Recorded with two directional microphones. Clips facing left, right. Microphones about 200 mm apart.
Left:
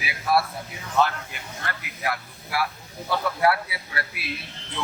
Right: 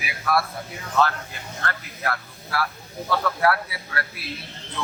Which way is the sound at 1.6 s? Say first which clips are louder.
Right 1 dB; 15° left (ahead or behind).